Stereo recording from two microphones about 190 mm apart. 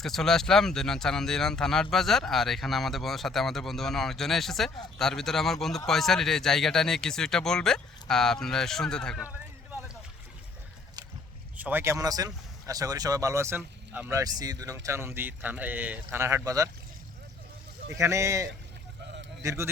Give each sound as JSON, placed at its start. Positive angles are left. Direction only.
{"t": 0.0, "sound": "speech", "side_deg": 0}
{"t": 11.5, "sound": "speech", "side_deg": -10}
{"t": 17.8, "sound": "a man's voice", "side_deg": -15}